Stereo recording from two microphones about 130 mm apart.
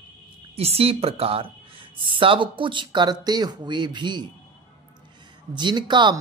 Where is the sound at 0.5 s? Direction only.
50° right (ahead or behind).